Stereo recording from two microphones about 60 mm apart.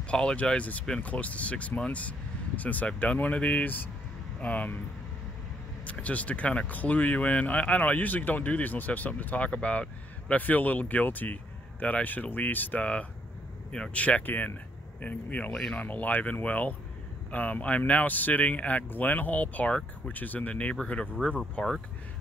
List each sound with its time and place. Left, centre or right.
0.1 s speech: centre
5.9 s speech: left